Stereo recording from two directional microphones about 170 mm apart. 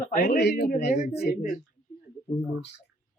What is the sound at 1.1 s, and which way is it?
Speech, 70° left (ahead or behind).